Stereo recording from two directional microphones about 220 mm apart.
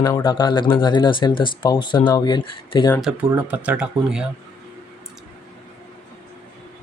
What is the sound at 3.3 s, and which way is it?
Speech, 5° right (ahead or behind).